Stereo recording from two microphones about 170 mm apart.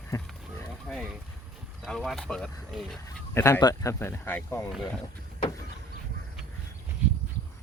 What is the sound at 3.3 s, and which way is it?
Speech, 15° left (ahead or behind).